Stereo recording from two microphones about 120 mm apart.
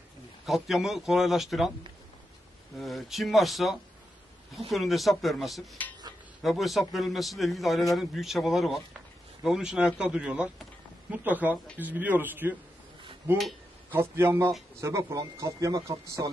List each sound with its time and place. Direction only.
0.5 s a man's voice: centre (ahead or behind)
2.8 s a man's voice: centre (ahead or behind)
5.8 s a sound: 15° left (ahead or behind)
6.4 s a man's voice: centre (ahead or behind); by 12.5 s 15° right (ahead or behind)
13.9 s speech: 20° right (ahead or behind)